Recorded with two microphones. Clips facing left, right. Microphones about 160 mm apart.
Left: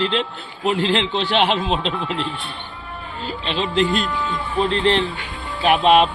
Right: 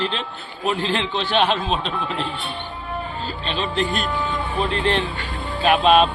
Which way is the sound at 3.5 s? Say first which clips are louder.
Left 3 dB; 25° left (ahead or behind).